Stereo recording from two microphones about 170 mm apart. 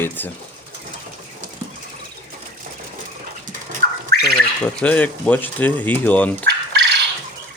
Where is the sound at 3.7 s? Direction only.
55° right (ahead or behind).